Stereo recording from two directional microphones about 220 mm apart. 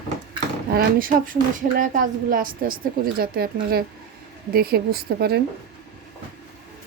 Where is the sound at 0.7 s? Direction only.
40° right (ahead or behind).